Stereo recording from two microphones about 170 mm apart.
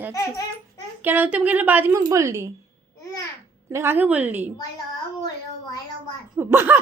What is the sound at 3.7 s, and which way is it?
Speech, 15° right (ahead or behind).